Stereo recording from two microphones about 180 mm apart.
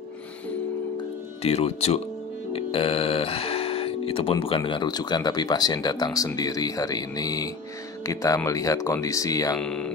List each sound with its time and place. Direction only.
1.4 s speech: 35° left (ahead or behind); by 9.6 s 20° left (ahead or behind)
9.6 s speech: 5° left (ahead or behind)